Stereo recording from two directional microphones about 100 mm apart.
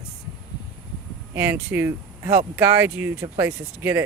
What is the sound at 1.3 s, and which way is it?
Speech, 20° right (ahead or behind).